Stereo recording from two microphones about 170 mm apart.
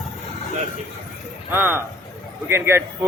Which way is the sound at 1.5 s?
10° right (ahead or behind).